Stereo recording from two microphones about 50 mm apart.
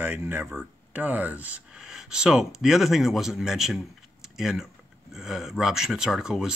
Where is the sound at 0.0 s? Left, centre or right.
Right.